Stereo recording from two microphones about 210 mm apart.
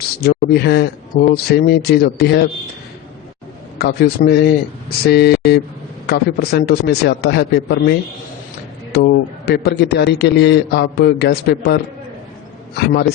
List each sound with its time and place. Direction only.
0.2 s a man's voice: 50° left (ahead or behind)
3.8 s a man's voice: 50° left (ahead or behind)